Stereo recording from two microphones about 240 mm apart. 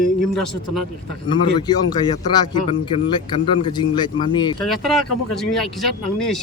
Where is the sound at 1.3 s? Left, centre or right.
Centre.